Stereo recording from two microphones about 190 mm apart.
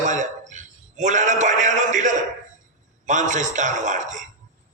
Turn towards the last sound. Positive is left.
turn(degrees=-40)  # may be behind; listen again after turning